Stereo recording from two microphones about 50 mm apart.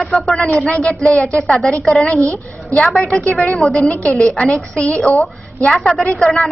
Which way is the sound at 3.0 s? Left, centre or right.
Left.